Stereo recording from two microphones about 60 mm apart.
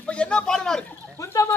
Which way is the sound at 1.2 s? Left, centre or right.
Left.